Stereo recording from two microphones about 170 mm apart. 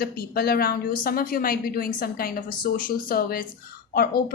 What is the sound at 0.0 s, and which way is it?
Speech, 65° left (ahead or behind).